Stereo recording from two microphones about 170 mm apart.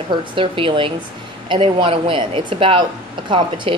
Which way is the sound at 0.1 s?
30° right (ahead or behind).